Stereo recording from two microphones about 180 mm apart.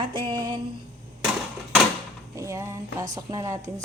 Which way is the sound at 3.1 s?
20° right (ahead or behind).